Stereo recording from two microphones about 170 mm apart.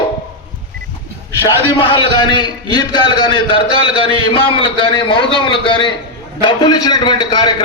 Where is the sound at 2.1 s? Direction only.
25° left (ahead or behind).